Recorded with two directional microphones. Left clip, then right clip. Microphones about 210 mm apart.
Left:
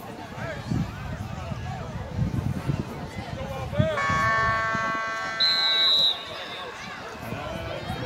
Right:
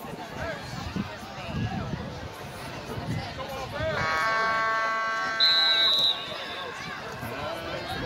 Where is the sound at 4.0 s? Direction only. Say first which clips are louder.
Left 2 dB; 30° left (ahead or behind).